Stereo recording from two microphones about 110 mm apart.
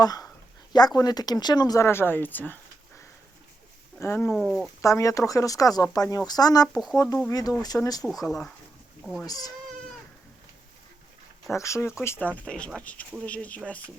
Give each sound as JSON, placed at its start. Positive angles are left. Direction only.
{"t": 0.0, "sound": "speech", "side_deg": 35}
{"t": 4.0, "sound": "speech", "side_deg": 20}
{"t": 4.3, "sound": "speech", "side_deg": 0}
{"t": 4.8, "sound": "speech", "side_deg": 30}
{"t": 8.0, "sound": "speech", "side_deg": 0}
{"t": 9.0, "sound": "cat", "side_deg": 5}
{"t": 9.2, "sound": "speech", "side_deg": 35}
{"t": 11.5, "sound": "speech", "side_deg": 25}
{"t": 12.5, "sound": "speech", "side_deg": 10}